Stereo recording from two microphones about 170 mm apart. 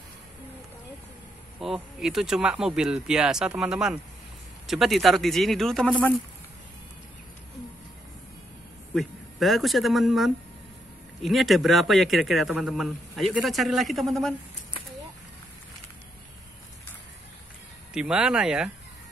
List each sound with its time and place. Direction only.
1.6 s speech: centre (ahead or behind)
8.9 s speech: centre (ahead or behind)
17.9 s speech: 5° right (ahead or behind)